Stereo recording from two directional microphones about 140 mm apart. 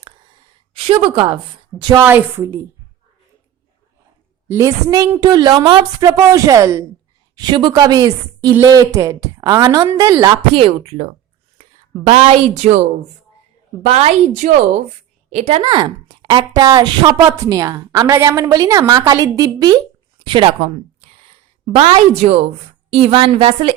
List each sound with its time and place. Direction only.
1.0 s a woman's voice: 35° right (ahead or behind)
2.0 s a woman's voice: 15° right (ahead or behind)
4.4 s a woman's voice: 20° right (ahead or behind)
10.6 s a woman's voice: 45° right (ahead or behind)
13.8 s a woman's voice: 50° right (ahead or behind)
14.4 s speech: 65° right (ahead or behind)
15.3 s a woman's voice: 50° right (ahead or behind)
15.6 s a woman's voice: 30° right (ahead or behind)
21.8 s a woman's voice: 45° right (ahead or behind)